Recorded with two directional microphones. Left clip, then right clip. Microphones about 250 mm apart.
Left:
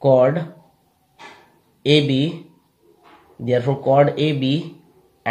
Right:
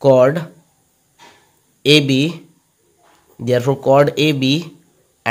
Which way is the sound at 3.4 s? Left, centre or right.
Right.